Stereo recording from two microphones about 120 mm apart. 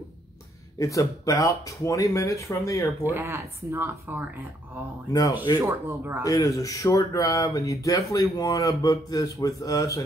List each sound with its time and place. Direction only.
0.7 s speech: 30° left (ahead or behind)
3.1 s speech: 20° right (ahead or behind)
5.6 s speech: 20° right (ahead or behind)
6.2 s speech: 30° left (ahead or behind)